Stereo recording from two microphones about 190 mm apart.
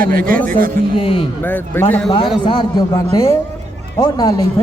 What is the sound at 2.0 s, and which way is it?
Speech, 25° left (ahead or behind).